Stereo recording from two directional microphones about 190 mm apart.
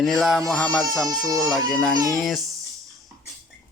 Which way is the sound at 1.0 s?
20° right (ahead or behind).